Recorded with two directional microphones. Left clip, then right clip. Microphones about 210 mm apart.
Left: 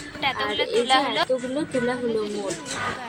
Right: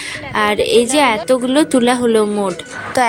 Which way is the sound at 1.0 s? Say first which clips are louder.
Right 10 dB; 50° right (ahead or behind).